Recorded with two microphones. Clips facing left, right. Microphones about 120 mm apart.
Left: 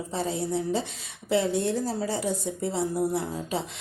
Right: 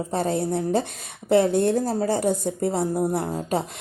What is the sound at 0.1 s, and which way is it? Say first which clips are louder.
Speech: right 4 dB; 55° right (ahead or behind).